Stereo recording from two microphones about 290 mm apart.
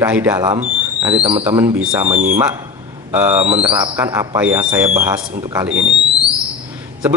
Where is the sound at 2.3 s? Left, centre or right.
Centre.